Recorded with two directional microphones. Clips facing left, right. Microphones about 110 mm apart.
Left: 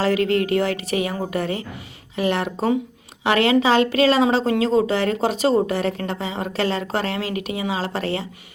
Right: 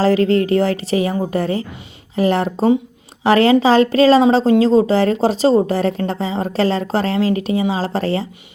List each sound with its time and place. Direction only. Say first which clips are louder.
0.0 s a woman's voice: right 5 dB; 35° right (ahead or behind)